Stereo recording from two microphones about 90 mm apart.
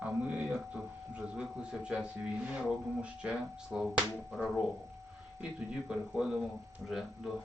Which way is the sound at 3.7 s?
15° right (ahead or behind).